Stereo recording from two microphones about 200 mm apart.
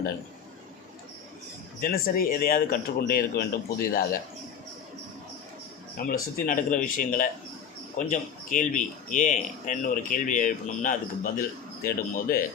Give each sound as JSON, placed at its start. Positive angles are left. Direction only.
{"t": 1.8, "sound": "speech", "side_deg": 45}
{"t": 6.0, "sound": "speech", "side_deg": 45}